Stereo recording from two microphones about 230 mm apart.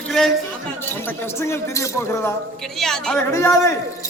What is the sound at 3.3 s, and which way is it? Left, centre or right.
Speech, centre.